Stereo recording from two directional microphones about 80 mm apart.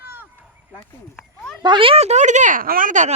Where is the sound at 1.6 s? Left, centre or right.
Right.